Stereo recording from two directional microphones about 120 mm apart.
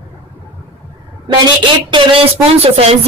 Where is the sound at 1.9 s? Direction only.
50° right (ahead or behind).